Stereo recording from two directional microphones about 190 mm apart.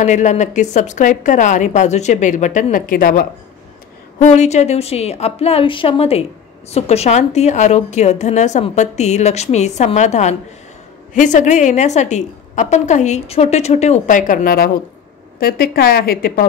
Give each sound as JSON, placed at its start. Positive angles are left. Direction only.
{"t": 0.0, "sound": "a woman's voice", "side_deg": 40}
{"t": 4.2, "sound": "a woman's voice", "side_deg": 35}